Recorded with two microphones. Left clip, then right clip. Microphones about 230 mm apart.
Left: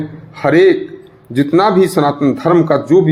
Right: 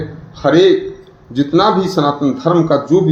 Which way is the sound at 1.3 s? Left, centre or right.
Left.